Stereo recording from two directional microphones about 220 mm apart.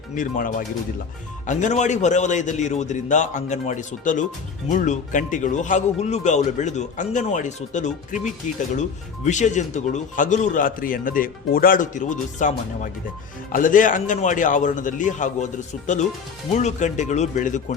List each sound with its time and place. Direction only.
0.1 s speech: 35° left (ahead or behind)
16.5 s speech: 30° left (ahead or behind)